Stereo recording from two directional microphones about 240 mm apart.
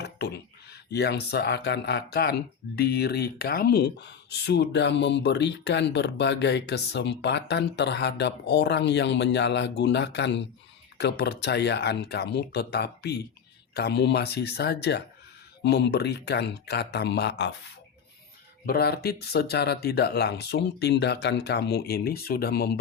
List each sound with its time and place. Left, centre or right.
0.0 s speech: left
18.6 s speech: left